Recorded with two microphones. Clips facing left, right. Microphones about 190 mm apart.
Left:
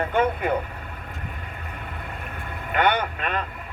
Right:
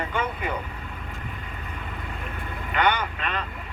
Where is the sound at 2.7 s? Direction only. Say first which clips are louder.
Left 2 dB; 50° left (ahead or behind).